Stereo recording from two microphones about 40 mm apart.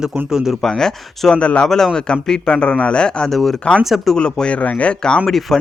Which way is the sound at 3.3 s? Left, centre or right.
Centre.